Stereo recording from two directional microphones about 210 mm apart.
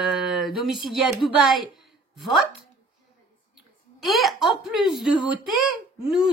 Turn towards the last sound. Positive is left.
turn(degrees=0)  # may be behind; listen again after turning